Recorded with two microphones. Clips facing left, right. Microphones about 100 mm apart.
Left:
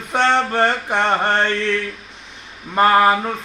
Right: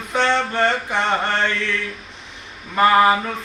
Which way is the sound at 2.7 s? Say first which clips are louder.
Left 1 dB; 40° left (ahead or behind).